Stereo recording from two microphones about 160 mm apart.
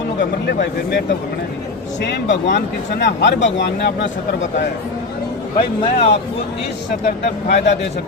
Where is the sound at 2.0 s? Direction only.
90° left.